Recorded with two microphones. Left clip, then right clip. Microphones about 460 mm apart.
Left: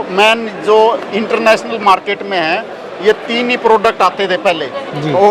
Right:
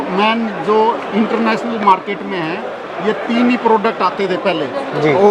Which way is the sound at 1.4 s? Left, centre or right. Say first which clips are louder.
Left 8 dB; left.